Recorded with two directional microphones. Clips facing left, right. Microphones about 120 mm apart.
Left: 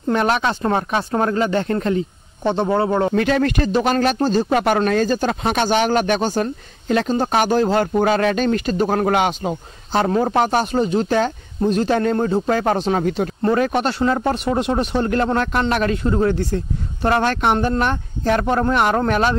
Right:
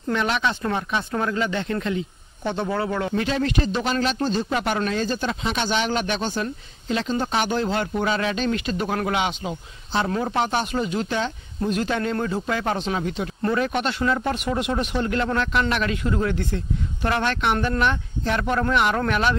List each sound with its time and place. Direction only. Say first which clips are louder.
0.1 s speech: left 5 dB; 45° left (ahead or behind)
2.4 s a man's voice: left 7 dB; 30° left (ahead or behind)
3.2 s speech: left 5 dB; 60° left (ahead or behind)
4.2 s speech: left 6 dB; 40° left (ahead or behind)
4.5 s speech: left 7 dB; 50° left (ahead or behind)